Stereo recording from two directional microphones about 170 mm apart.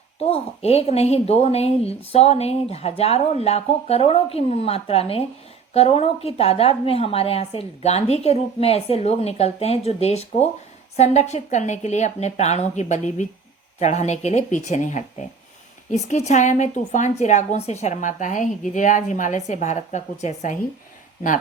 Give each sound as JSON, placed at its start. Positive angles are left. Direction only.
{"t": 0.2, "sound": "a woman's voice", "side_deg": 35}